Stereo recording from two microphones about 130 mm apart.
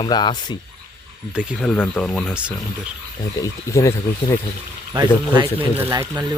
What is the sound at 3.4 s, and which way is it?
Speech, 25° left (ahead or behind).